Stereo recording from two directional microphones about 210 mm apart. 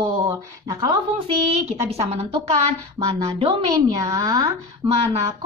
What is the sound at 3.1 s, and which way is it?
A woman's voice, 20° right (ahead or behind).